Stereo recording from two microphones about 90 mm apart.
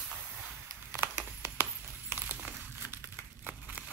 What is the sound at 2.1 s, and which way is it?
Crumpling, 20° right (ahead or behind).